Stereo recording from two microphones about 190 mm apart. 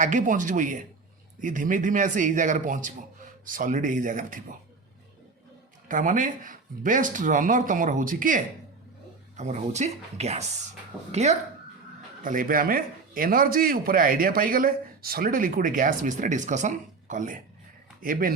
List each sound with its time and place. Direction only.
0.0 s a man's voice: 45° right (ahead or behind)
5.9 s a man's voice: 45° right (ahead or behind)